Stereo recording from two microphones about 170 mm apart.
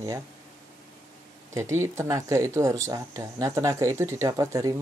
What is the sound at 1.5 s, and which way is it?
Speech, 15° right (ahead or behind).